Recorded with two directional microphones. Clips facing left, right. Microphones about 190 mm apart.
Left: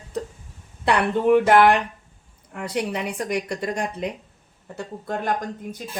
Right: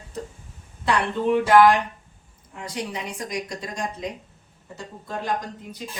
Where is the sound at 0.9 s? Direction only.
60° left (ahead or behind).